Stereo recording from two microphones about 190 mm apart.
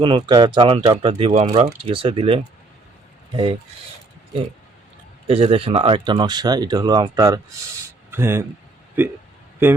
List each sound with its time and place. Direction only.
0.0 s speech: 25° right (ahead or behind)
5.3 s speech: 30° right (ahead or behind)
7.8 s a sound: 10° right (ahead or behind)
9.0 s speech: 10° right (ahead or behind)